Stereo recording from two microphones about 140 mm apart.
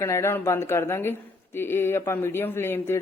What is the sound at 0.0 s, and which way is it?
Speech, 20° left (ahead or behind).